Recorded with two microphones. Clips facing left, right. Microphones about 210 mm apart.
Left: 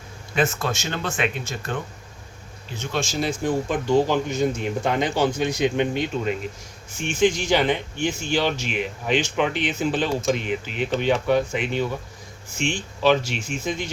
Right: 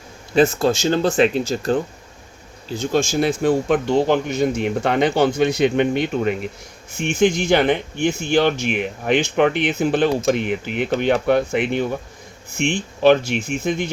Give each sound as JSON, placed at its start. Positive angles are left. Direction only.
{"t": 0.3, "sound": "speech", "side_deg": -30}
{"t": 3.2, "sound": "speech", "side_deg": -65}